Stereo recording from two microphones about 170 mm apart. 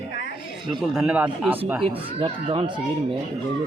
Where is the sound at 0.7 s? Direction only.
Centre (ahead or behind).